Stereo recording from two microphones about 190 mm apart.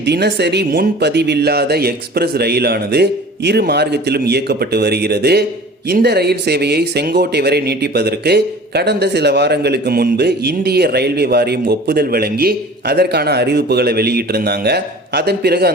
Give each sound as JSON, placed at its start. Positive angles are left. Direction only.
{"t": 0.0, "sound": "speech", "side_deg": -60}